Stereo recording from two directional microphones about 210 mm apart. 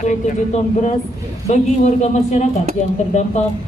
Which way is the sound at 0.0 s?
35° left (ahead or behind).